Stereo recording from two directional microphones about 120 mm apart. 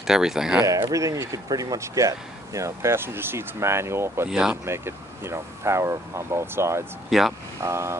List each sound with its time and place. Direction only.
0.0 s speech: 5° right (ahead or behind)
0.8 s speech: 25° right (ahead or behind)
4.3 s speech: 5° right (ahead or behind)
4.6 s speech: 20° right (ahead or behind)
7.1 s speech: centre (ahead or behind)
7.6 s speech: 20° right (ahead or behind)